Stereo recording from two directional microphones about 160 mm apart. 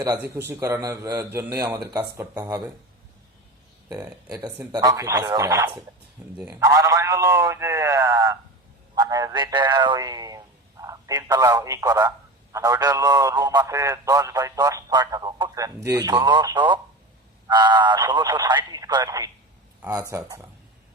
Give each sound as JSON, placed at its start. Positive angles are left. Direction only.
{"t": 0.3, "sound": "a man's voice", "side_deg": -15}
{"t": 3.8, "sound": "a man's voice", "side_deg": -20}